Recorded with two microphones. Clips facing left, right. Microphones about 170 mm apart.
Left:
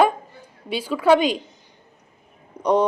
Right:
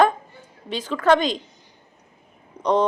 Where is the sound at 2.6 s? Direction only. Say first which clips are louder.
Left 1 dB; 10° left (ahead or behind).